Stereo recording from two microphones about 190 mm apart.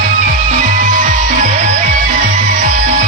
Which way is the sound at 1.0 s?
45° right (ahead or behind).